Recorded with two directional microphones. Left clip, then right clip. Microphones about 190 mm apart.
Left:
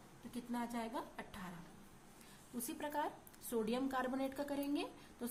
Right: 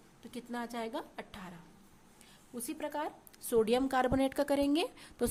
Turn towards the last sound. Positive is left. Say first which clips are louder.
# right 10 dB
turn(degrees=-45)  # may be behind; listen again after turning